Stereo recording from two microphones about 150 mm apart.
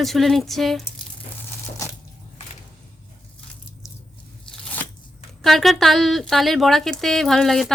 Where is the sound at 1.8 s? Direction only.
20° left (ahead or behind).